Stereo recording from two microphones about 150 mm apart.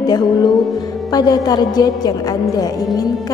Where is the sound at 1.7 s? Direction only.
25° left (ahead or behind).